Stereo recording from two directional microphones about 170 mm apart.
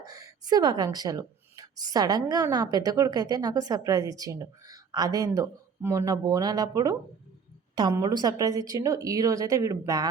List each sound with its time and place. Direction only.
0.0 s speech: 20° right (ahead or behind)